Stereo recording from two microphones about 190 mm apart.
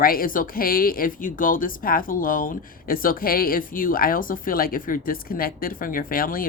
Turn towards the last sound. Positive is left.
turn(degrees=50)  # may be behind; listen again after turning